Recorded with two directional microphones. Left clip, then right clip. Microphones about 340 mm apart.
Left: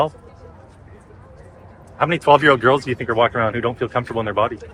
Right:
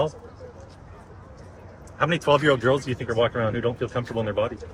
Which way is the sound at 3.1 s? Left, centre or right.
Centre.